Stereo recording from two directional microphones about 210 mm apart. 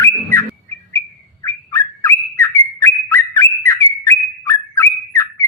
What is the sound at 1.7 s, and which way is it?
Bird, 10° left (ahead or behind).